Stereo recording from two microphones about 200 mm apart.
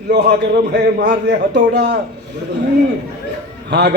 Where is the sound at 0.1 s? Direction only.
55° right (ahead or behind).